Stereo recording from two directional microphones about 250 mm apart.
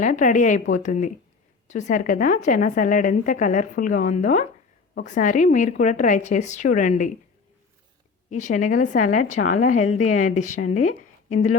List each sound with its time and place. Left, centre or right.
0.0 s a woman's voice: left
8.3 s a woman's voice: left
10.8 s speech: left